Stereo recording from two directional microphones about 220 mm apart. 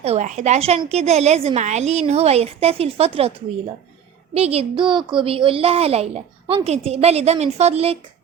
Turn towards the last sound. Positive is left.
turn(degrees=-30)  # may be behind; listen again after turning